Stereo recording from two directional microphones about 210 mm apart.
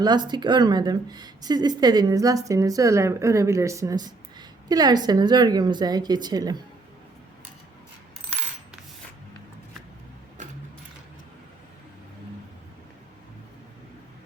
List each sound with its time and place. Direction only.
0.0 s a woman's voice: 20° right (ahead or behind)